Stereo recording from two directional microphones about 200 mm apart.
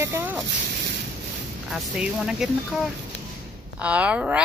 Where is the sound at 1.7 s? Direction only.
5° right (ahead or behind).